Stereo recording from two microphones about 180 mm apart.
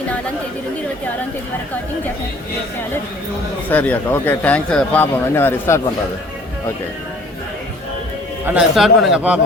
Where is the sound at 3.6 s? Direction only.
10° left (ahead or behind).